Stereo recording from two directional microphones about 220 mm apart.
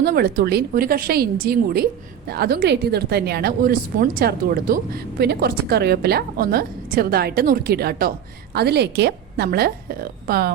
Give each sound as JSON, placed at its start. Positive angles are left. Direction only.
{"t": 0.0, "sound": "a woman's voice", "side_deg": -45}